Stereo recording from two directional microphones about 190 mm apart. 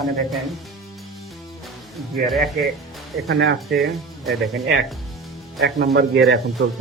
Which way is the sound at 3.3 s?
65° right (ahead or behind).